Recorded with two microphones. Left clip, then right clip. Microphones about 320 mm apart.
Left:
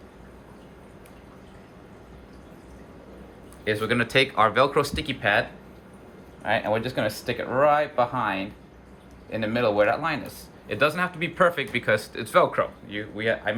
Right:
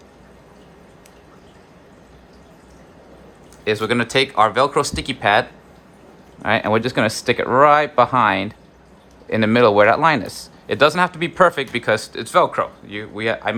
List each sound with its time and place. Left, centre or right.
3.6 s speech: centre